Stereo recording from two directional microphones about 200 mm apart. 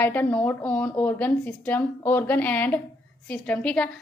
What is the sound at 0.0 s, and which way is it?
A woman's voice, 10° left (ahead or behind).